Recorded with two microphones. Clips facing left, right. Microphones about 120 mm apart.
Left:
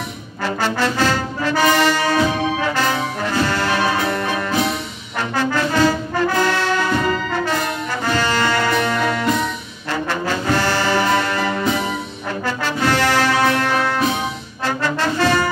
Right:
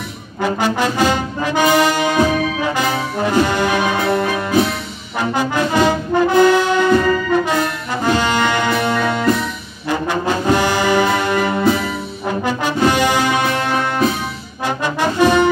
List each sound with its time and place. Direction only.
0.4 s brass instrument: 15° right (ahead or behind)
5.3 s brass instrument: 15° right (ahead or behind)
8.0 s music: 15° right (ahead or behind)
9.8 s brass instrument: 15° right (ahead or behind)